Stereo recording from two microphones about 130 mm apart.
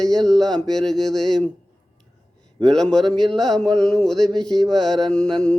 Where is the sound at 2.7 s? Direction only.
5° left (ahead or behind).